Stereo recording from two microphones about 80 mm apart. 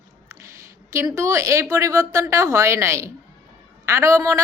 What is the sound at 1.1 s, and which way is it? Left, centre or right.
A woman's voice, right.